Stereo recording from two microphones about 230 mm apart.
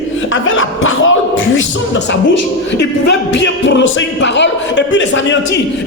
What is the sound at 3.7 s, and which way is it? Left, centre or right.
A man's voice, left.